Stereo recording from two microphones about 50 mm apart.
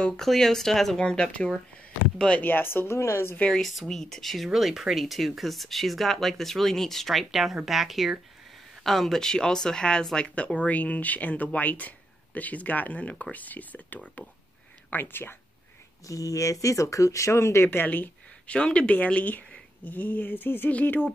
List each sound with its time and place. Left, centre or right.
0.2 s speech: centre
1.0 s speech: centre
2.4 s speech: left
3.0 s a woman's voice: left
3.6 s speech: centre; by 13.9 s left
14.9 s speech: left
16.1 s speech: left
17.6 s speech: left
18.5 s speech: left
20.7 s speech: left